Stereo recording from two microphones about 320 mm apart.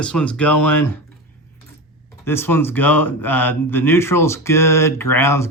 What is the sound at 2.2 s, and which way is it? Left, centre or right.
Speech, centre.